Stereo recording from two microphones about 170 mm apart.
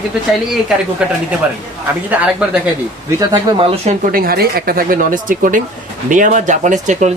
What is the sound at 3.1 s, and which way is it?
Speech, 30° right (ahead or behind).